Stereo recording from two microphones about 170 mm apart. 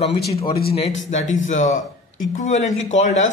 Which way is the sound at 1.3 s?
45° left (ahead or behind).